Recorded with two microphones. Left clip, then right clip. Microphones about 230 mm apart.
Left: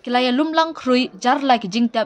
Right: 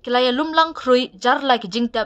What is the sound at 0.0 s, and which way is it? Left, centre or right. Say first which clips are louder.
A woman's voice: even; centre.